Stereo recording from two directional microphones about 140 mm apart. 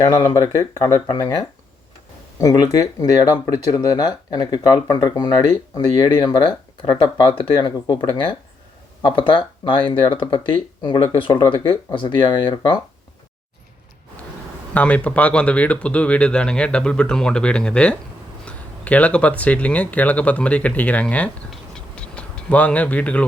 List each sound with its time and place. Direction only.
0.0 s speech: 30° left (ahead or behind)
14.7 s speech: 10° left (ahead or behind)